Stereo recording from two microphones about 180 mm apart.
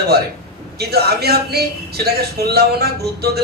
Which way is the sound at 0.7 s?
60° right (ahead or behind).